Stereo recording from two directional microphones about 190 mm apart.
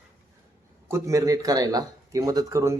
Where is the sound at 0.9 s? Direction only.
15° right (ahead or behind).